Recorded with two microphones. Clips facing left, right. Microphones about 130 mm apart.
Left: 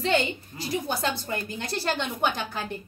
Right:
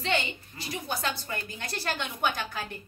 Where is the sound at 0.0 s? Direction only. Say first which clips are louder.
Left 5 dB; 40° left (ahead or behind).